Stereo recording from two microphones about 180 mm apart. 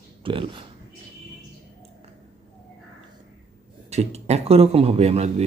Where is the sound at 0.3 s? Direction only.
30° right (ahead or behind).